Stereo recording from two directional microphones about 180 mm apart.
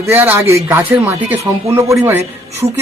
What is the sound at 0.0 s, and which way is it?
Speech, 15° right (ahead or behind).